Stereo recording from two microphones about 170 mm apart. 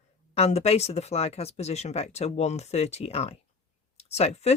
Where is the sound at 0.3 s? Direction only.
40° left (ahead or behind).